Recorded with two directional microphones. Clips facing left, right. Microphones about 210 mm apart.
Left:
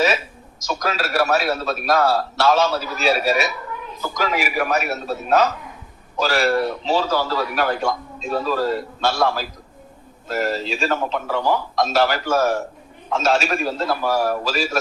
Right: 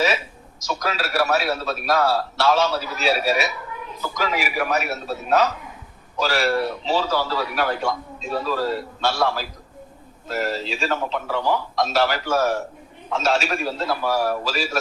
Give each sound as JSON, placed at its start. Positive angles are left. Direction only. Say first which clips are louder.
{"t": 0.6, "sound": "a man's voice", "louder": "left 2 dB", "side_deg": 45}